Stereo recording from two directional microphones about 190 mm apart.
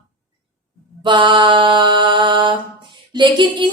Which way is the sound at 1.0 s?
25° right (ahead or behind).